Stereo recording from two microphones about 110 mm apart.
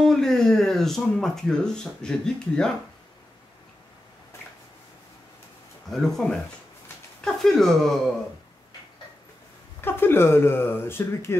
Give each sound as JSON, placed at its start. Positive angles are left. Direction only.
{"t": 0.0, "sound": "speech", "side_deg": 5}
{"t": 5.9, "sound": "speech", "side_deg": 5}
{"t": 9.8, "sound": "speech", "side_deg": 20}